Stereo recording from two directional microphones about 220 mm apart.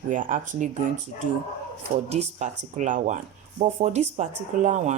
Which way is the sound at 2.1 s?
30° right (ahead or behind).